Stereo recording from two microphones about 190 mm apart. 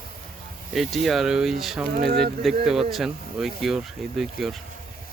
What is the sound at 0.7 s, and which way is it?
Speech, centre (ahead or behind).